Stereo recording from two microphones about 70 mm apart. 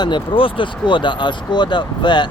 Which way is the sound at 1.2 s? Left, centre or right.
Left.